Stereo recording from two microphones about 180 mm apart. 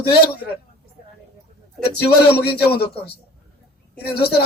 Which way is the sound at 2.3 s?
60° left (ahead or behind).